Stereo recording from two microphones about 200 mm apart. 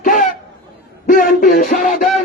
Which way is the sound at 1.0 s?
40° left (ahead or behind).